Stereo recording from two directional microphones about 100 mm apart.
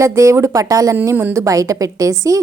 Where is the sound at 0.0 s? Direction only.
30° right (ahead or behind).